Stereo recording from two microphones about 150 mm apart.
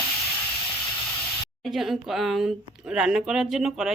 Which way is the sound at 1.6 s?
Centre (ahead or behind).